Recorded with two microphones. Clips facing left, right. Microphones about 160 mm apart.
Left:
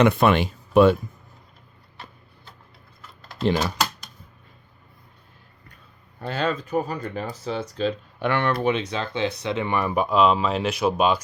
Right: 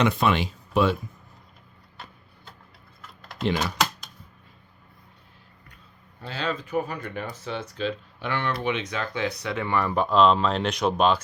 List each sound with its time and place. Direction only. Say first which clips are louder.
0.0 s speech: left 5 dB; 55° left (ahead or behind)
3.1 s typing: even; centre (ahead or behind)
3.4 s speech: left 3 dB; 35° left (ahead or behind)
6.1 s speech: left 5 dB; 55° left (ahead or behind)
8.2 s speech: left 6 dB; 55° left (ahead or behind)
8.6 s speech: left 4 dB; 35° left (ahead or behind); by 11.2 s 10° left (ahead or behind)